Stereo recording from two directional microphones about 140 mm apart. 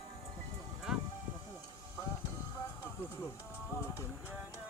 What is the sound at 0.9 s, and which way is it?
Music, 5° right (ahead or behind).